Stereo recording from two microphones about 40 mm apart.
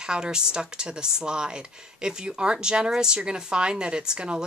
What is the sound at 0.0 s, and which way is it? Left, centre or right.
A woman's voice, right.